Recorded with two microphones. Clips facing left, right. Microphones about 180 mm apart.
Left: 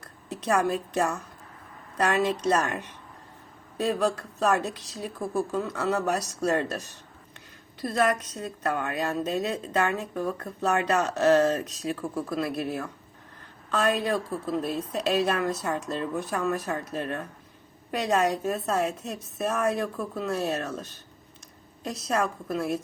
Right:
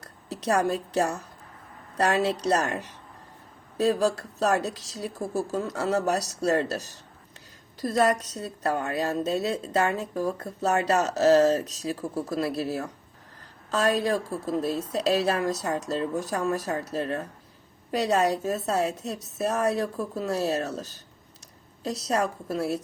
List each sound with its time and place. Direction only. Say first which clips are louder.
0.0 s a woman's voice: right 2 dB; 35° right (ahead or behind)
22.1 s a woman's voice: even; 35° right (ahead or behind)